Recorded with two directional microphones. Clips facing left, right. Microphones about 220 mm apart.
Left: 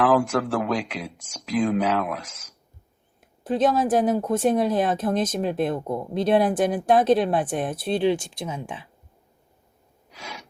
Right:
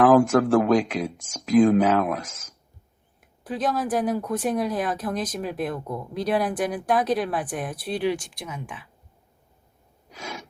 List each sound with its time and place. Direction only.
0.0 s speech: 45° right (ahead or behind)
3.2 s speech: 25° left (ahead or behind)
10.1 s gasp: 45° right (ahead or behind)